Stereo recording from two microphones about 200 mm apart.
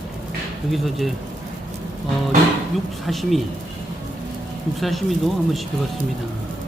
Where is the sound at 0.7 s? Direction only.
Centre (ahead or behind).